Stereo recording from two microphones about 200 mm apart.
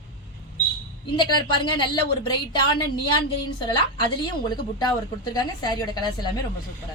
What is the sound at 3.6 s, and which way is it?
A woman's voice, 20° left (ahead or behind).